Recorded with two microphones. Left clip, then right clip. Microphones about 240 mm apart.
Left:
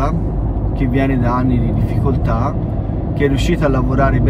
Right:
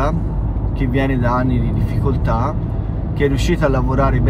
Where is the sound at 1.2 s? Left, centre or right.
Centre.